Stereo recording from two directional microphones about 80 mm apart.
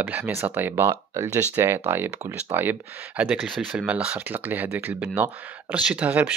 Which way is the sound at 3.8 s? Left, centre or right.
Centre.